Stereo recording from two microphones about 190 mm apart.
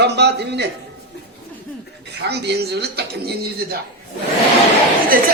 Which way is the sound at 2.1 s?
60° right (ahead or behind).